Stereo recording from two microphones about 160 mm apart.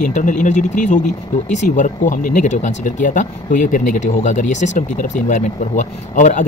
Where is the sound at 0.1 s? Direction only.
50° left (ahead or behind).